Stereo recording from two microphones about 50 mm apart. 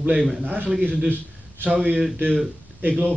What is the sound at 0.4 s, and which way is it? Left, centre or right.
Speech, right.